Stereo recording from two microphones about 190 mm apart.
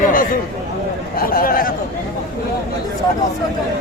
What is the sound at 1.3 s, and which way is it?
Speech, 50° left (ahead or behind).